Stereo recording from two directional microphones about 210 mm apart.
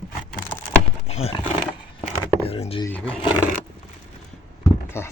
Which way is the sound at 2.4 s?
25° left (ahead or behind).